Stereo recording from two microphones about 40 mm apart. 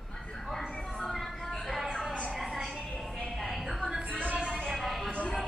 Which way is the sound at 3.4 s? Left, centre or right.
Centre.